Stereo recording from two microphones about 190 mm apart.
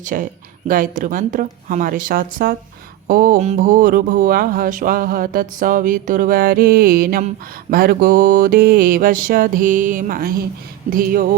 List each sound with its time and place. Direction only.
0.0 s speech: 45° right (ahead or behind)